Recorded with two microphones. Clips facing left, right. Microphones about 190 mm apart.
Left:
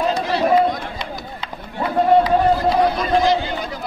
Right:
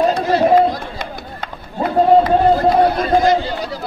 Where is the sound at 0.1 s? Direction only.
50° right (ahead or behind).